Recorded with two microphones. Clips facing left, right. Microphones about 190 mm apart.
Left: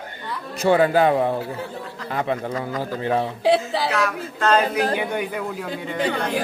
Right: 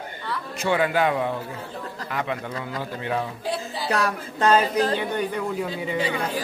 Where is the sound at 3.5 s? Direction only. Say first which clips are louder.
Left 9 dB; 75° left (ahead or behind).